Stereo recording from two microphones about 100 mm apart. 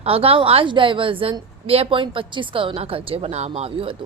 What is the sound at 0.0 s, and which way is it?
A woman's voice, 75° right (ahead or behind).